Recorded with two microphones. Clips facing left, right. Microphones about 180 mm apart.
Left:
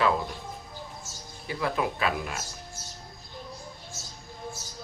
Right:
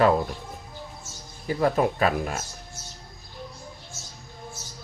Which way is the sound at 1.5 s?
45° right (ahead or behind).